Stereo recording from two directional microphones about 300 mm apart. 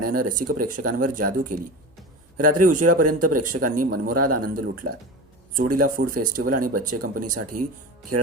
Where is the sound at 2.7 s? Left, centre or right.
Right.